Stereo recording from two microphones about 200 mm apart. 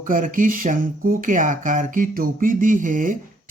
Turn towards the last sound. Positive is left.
turn(degrees=-40)  # may be behind; listen again after turning